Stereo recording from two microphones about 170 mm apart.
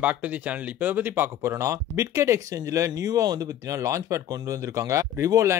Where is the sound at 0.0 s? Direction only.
10° right (ahead or behind).